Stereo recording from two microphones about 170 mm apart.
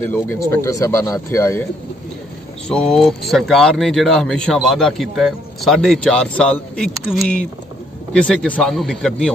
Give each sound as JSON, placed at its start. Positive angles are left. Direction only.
{"t": 0.1, "sound": "speech", "side_deg": 15}
{"t": 2.7, "sound": "speech", "side_deg": 5}